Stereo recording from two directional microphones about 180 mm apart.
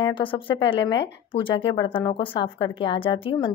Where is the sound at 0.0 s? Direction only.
30° left (ahead or behind).